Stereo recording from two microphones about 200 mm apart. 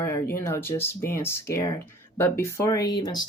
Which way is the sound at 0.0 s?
15° left (ahead or behind).